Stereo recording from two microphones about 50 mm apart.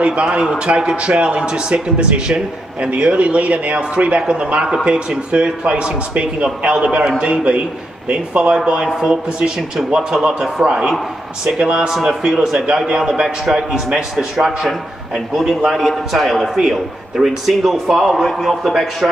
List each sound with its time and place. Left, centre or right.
0.0 s a man's voice: right; by 18.7 s centre